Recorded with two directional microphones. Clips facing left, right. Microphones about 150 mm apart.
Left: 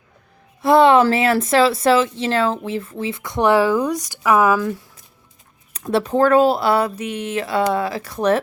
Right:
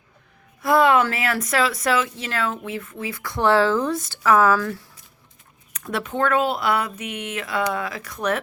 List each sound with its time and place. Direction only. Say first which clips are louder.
0.6 s a woman's voice: left 5 dB; 25° left (ahead or behind)
5.7 s speech: left 8 dB; 30° left (ahead or behind)